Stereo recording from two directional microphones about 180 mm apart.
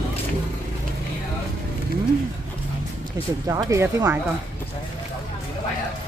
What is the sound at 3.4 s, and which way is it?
Speech, 15° right (ahead or behind).